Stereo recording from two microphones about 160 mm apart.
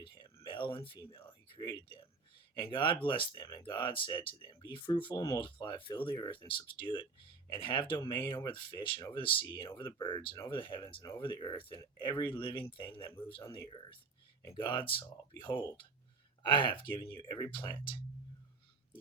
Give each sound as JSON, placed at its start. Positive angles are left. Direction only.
{"t": 0.0, "sound": "speech", "side_deg": 30}